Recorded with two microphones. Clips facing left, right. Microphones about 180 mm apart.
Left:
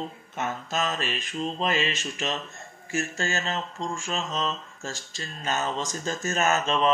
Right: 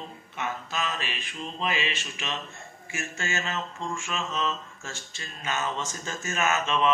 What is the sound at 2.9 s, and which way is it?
Mantra, 40° left (ahead or behind).